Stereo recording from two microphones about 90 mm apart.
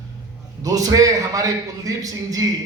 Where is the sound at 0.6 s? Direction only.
40° right (ahead or behind).